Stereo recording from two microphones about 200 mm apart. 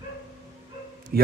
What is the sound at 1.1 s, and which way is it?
Speech, 50° right (ahead or behind).